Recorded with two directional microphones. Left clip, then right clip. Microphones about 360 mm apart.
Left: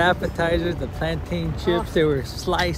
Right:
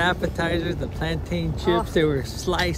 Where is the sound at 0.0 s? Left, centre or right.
Centre.